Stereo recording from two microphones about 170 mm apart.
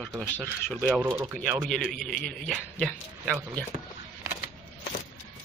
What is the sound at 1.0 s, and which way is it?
Speech, 15° right (ahead or behind).